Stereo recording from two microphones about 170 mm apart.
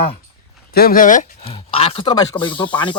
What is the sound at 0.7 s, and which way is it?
Speech, 60° left (ahead or behind).